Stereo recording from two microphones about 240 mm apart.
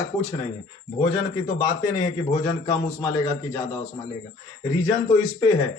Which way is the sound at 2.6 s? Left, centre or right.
Centre.